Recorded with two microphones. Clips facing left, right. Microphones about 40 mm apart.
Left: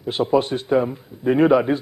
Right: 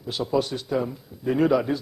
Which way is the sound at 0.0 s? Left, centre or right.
Left.